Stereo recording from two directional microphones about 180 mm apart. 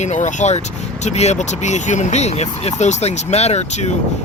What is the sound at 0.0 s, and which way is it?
Speech, 40° left (ahead or behind).